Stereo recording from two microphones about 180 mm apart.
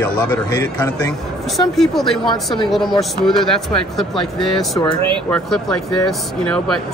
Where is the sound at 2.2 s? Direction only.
25° left (ahead or behind).